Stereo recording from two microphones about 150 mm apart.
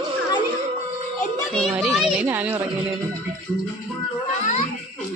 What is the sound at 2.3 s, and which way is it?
Speech, 15° right (ahead or behind).